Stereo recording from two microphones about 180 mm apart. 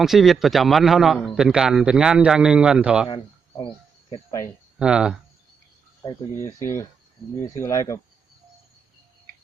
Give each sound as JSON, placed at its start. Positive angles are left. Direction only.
{"t": 0.0, "sound": "a man's voice", "side_deg": 0}
{"t": 4.8, "sound": "a man's voice", "side_deg": -5}
{"t": 6.0, "sound": "speech", "side_deg": 20}